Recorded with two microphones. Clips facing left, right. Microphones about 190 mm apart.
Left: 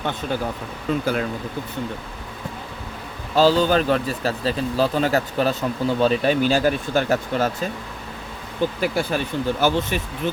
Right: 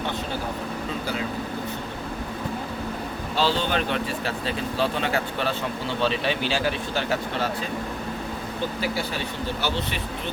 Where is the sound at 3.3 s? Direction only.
40° left (ahead or behind).